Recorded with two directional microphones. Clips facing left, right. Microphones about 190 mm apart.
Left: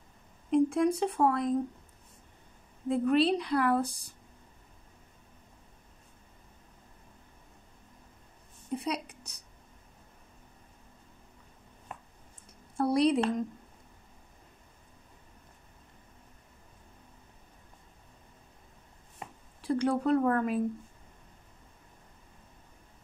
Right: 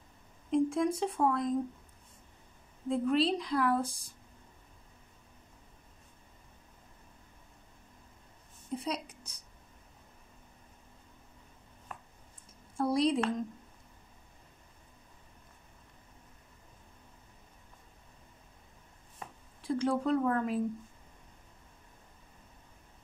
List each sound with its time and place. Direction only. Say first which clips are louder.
0.5 s speech: left 3 dB; 65° left (ahead or behind)
2.9 s a woman's voice: left 3 dB; 60° left (ahead or behind)
8.7 s a woman's voice: left 2 dB; 65° left (ahead or behind)
12.7 s a woman's voice: left 3 dB; 65° left (ahead or behind)
19.7 s a woman's voice: left 3 dB; 60° left (ahead or behind)